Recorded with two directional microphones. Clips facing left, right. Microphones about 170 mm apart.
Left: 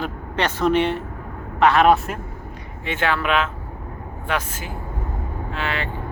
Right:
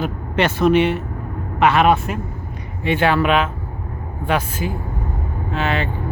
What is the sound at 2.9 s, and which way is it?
A man's voice, 15° right (ahead or behind).